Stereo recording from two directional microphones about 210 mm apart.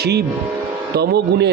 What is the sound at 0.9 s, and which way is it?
Speech, 50° right (ahead or behind).